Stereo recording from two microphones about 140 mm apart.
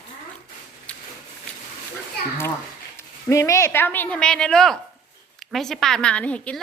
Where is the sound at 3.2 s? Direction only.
20° left (ahead or behind).